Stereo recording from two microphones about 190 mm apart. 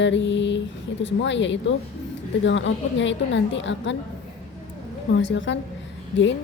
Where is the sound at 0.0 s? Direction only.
70° left (ahead or behind).